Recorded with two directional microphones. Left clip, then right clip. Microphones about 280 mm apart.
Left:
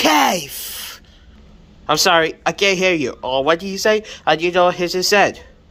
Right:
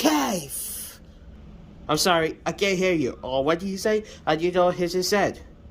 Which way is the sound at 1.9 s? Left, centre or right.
Centre.